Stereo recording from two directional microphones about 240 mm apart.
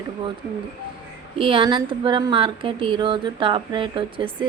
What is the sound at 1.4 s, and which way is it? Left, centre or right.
A woman's voice, right.